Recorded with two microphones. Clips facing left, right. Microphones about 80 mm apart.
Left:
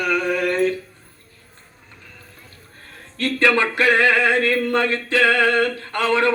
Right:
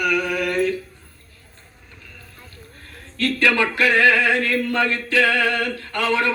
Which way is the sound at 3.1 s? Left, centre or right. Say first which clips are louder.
Left 1 dB; left.